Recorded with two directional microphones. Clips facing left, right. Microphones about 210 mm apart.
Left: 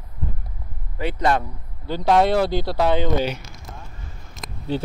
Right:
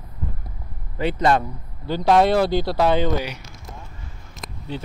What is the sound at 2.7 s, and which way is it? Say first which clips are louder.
Speech: right 1 dB; 20° left (ahead or behind).